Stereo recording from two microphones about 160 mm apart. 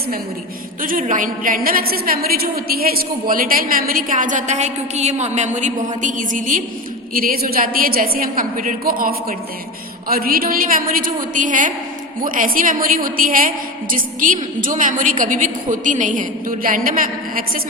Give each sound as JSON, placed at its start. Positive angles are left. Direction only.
{"t": 0.8, "sound": "a woman's voice", "side_deg": -55}